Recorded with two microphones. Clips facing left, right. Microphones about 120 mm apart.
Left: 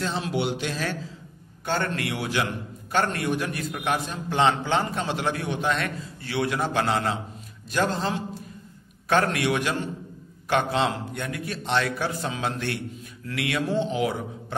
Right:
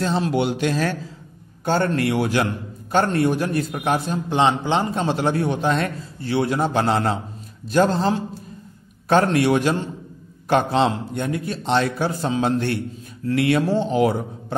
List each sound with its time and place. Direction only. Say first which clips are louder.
0.0 s speech: right 6 dB; 40° right (ahead or behind)
1.6 s a man's voice: right 7 dB; 35° right (ahead or behind)
2.9 s a man's voice: right 6 dB; 30° right (ahead or behind)
4.3 s a man's voice: right 3 dB; 20° right (ahead or behind); by 14.1 s 40° right (ahead or behind)